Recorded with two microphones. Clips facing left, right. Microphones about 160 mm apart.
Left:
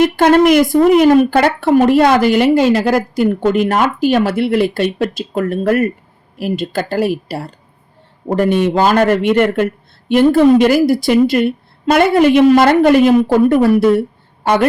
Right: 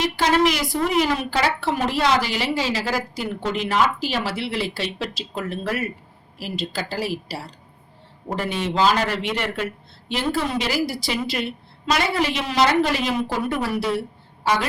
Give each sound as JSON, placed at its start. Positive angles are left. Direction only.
{"t": 0.0, "sound": "a woman's voice", "side_deg": 55}